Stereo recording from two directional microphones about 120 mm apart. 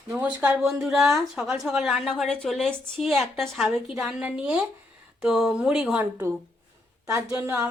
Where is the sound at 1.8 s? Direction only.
Centre (ahead or behind).